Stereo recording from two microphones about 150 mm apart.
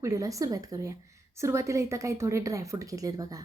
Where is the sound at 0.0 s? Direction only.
20° right (ahead or behind).